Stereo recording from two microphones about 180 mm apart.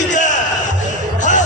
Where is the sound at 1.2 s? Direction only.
45° left (ahead or behind).